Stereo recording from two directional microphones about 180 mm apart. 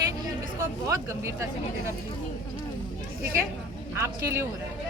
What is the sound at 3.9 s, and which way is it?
Speech, 15° right (ahead or behind).